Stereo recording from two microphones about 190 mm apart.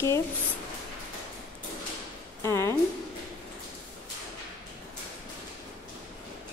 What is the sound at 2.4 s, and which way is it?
Speech, 15° left (ahead or behind).